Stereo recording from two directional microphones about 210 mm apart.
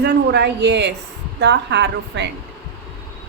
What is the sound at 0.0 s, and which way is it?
A woman's voice, 50° right (ahead or behind).